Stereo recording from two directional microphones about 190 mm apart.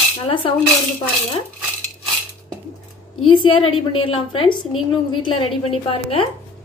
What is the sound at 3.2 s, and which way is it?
A woman's voice, 30° left (ahead or behind).